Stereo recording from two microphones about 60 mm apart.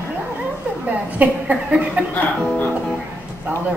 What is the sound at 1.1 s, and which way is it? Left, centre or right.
Speech, right.